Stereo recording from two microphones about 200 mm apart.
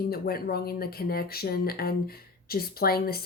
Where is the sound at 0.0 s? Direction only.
50° left (ahead or behind).